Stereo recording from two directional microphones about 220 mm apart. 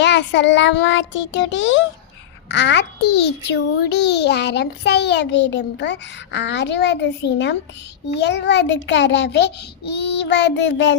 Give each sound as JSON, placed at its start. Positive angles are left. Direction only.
{"t": 0.0, "sound": "child singing", "side_deg": 50}
{"t": 2.5, "sound": "a child's voice", "side_deg": 50}